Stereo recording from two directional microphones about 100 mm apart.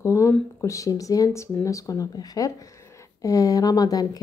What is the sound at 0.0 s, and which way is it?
A woman's voice, 30° left (ahead or behind).